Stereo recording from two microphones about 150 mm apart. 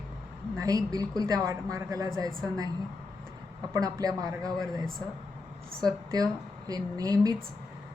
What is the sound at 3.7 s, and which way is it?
Speech, 25° right (ahead or behind).